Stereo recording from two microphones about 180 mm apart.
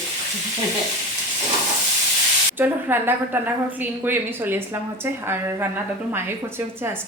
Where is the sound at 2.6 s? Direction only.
10° right (ahead or behind).